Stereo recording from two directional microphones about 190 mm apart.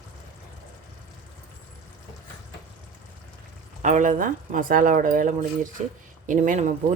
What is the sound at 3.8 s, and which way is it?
A woman's voice, 40° right (ahead or behind).